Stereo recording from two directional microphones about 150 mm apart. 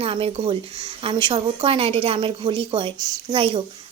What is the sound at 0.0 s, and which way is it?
Speech, 40° right (ahead or behind).